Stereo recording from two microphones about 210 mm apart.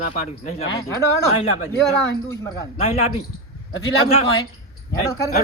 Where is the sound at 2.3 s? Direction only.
15° left (ahead or behind).